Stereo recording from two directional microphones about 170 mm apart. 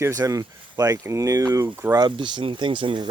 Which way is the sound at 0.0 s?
20° right (ahead or behind).